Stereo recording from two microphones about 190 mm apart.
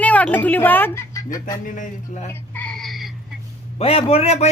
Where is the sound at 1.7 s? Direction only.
40° left (ahead or behind).